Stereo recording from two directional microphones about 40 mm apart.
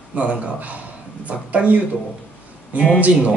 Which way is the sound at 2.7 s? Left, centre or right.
Right.